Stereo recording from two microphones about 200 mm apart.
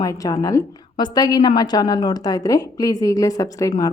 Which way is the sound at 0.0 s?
15° left (ahead or behind).